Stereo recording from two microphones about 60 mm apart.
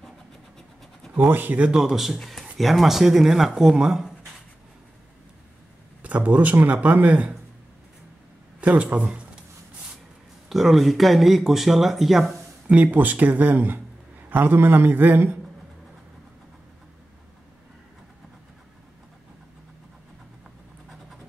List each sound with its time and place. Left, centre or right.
1.3 s a man's voice: right
1.6 s speech: centre
6.0 s speech: right
8.5 s speech: right
9.0 s a sound: centre
10.5 s speech: centre
12.6 s a man's voice: centre